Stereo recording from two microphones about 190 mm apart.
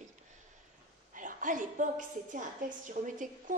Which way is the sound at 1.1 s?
45° right (ahead or behind).